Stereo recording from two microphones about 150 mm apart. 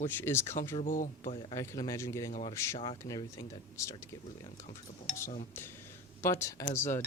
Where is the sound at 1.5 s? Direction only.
20° left (ahead or behind).